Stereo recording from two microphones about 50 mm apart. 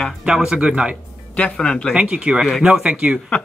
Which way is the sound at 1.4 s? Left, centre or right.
Centre.